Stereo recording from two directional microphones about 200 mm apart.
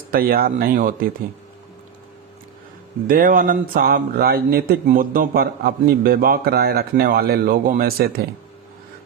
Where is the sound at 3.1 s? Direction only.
45° right (ahead or behind).